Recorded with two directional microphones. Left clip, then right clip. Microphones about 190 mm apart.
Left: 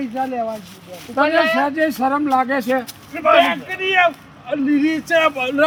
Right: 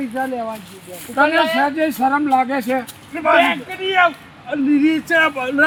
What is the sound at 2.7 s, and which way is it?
Speech, 30° left (ahead or behind).